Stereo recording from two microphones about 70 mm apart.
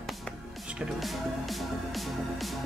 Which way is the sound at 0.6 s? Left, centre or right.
Centre.